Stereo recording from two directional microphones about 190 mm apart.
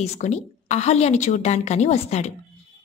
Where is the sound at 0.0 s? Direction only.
35° left (ahead or behind).